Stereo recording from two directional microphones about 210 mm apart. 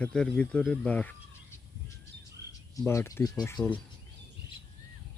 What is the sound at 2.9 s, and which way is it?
Speech, 15° left (ahead or behind).